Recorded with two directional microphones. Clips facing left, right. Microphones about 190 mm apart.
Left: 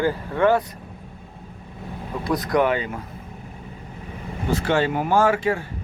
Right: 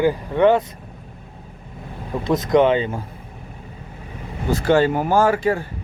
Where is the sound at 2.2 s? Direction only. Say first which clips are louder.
Right 5 dB; 20° right (ahead or behind).